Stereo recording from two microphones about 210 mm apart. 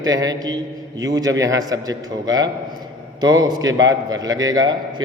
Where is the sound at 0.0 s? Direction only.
15° right (ahead or behind).